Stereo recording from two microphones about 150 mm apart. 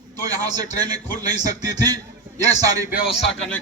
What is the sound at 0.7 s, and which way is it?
A man's voice, 25° right (ahead or behind).